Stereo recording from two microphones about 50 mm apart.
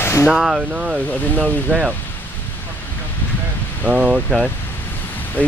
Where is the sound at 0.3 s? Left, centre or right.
Centre.